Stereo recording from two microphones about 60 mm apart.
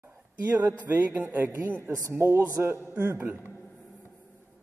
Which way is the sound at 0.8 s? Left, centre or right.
Right.